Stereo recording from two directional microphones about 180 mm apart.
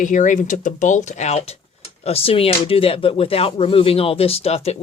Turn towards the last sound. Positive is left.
turn(degrees=35)  # may be behind; listen again after turning